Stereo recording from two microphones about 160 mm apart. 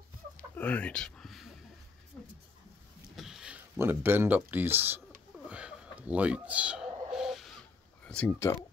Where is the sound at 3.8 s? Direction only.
15° right (ahead or behind).